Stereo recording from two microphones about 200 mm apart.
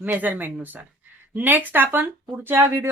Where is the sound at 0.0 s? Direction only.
10° right (ahead or behind).